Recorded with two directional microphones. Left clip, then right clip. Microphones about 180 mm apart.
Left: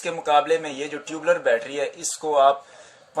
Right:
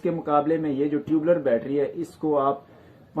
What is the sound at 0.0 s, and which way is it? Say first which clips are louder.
Speech: left 3 dB; 30° left (ahead or behind).